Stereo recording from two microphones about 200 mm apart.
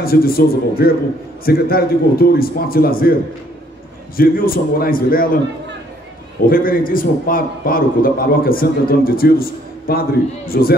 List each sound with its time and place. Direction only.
0.0 s a man's voice: 50° left (ahead or behind)
4.2 s a man's voice: 45° left (ahead or behind)
6.5 s a man's voice: 45° left (ahead or behind)